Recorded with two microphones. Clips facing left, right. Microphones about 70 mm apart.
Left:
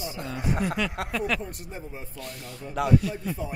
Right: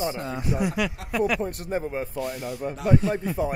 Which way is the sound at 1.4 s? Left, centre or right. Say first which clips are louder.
Right 10 dB; right.